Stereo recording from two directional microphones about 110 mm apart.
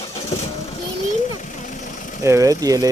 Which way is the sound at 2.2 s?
30° right (ahead or behind).